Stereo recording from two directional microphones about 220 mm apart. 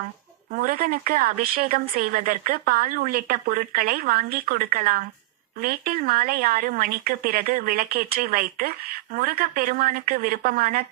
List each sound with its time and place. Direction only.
0.5 s speech: 40° right (ahead or behind)